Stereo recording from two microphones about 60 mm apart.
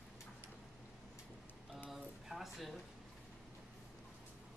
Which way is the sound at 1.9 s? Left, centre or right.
Centre.